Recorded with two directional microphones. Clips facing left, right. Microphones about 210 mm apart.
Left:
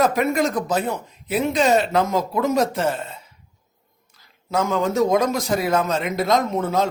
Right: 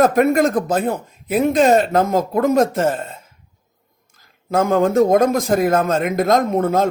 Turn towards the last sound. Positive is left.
turn(degrees=-55)  # may be behind; listen again after turning